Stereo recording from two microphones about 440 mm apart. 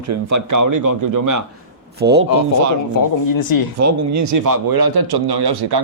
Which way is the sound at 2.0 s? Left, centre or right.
Right.